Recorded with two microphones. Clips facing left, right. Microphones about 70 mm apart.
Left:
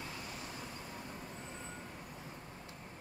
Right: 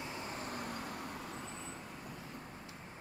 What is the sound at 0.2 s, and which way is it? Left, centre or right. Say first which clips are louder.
Vehicle: right 4 dB; right.